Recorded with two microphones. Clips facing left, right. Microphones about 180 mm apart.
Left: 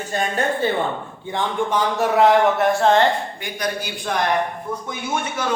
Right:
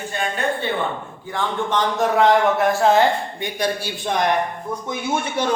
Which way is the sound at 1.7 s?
10° left (ahead or behind).